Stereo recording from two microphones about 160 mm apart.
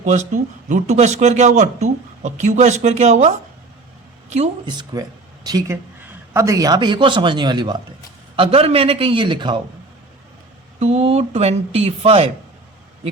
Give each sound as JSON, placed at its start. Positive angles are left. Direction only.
{"t": 0.0, "sound": "speech", "side_deg": -50}
{"t": 4.6, "sound": "speech", "side_deg": -25}
{"t": 10.8, "sound": "speech", "side_deg": -45}